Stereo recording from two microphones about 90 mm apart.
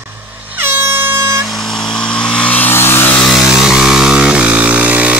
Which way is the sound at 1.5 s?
5° left (ahead or behind).